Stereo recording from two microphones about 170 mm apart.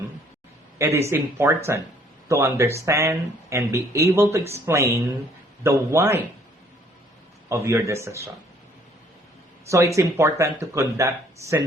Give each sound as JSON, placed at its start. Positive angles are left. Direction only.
{"t": 0.8, "sound": "speech", "side_deg": -15}
{"t": 7.5, "sound": "speech", "side_deg": -15}
{"t": 9.6, "sound": "speech", "side_deg": -15}